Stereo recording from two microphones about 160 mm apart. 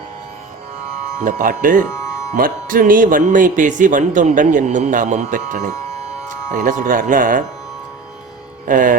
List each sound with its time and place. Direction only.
1.2 s speech: 55° right (ahead or behind)
8.6 s speech: 55° right (ahead or behind)